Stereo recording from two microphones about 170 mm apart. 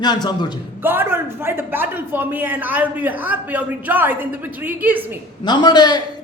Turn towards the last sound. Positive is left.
turn(degrees=25)  # may be behind; listen again after turning